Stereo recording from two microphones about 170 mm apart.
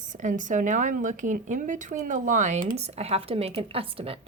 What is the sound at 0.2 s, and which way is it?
Speech, 45° right (ahead or behind).